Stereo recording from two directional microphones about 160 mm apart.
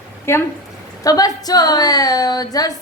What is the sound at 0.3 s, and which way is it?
A woman's voice, 15° left (ahead or behind).